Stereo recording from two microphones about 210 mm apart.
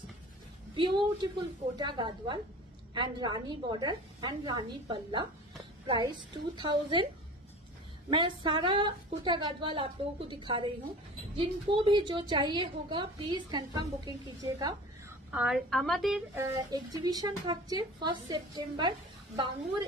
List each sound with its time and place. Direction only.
0.7 s a woman's voice: 20° right (ahead or behind)
8.1 s a woman's voice: 20° right (ahead or behind)
15.3 s a woman's voice: centre (ahead or behind)
16.3 s a woman's voice: 15° right (ahead or behind)